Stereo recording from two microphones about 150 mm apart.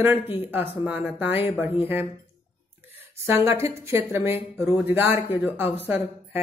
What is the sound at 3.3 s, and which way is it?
Speech, 20° right (ahead or behind).